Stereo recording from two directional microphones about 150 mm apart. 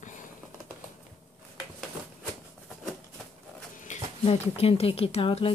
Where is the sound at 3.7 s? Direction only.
55° left (ahead or behind).